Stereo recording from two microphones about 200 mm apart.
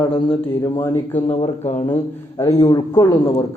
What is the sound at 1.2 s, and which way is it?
Speech, 35° left (ahead or behind).